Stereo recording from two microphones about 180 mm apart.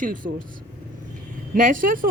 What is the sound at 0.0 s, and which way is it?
Speech, 50° right (ahead or behind).